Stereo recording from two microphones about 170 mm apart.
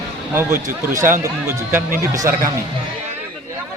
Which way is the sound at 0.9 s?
15° right (ahead or behind).